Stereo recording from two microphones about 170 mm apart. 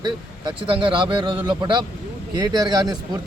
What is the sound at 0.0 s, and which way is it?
A man's voice, 30° right (ahead or behind).